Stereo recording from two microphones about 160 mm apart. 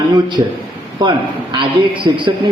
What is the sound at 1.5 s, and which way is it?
Speech, 30° right (ahead or behind).